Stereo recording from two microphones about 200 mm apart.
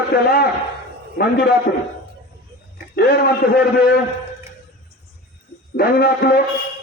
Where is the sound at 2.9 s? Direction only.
50° left (ahead or behind).